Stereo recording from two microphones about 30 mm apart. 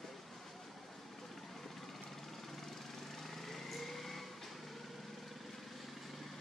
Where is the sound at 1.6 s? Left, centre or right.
Centre.